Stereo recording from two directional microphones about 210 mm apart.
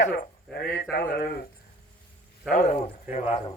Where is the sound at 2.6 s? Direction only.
35° left (ahead or behind).